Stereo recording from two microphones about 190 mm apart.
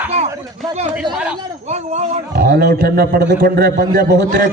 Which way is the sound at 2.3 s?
50° right (ahead or behind).